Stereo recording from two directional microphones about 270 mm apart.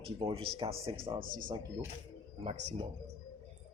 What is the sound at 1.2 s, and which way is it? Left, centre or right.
Speech, right.